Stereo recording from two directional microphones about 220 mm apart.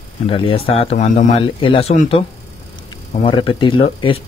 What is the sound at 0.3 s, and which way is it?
Speech, 25° left (ahead or behind).